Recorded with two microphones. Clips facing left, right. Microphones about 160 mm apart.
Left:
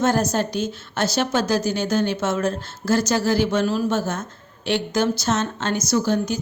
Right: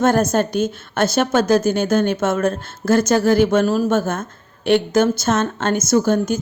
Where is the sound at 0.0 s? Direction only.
55° right (ahead or behind).